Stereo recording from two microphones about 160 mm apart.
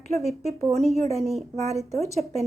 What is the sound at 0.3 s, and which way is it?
Speech, 40° right (ahead or behind).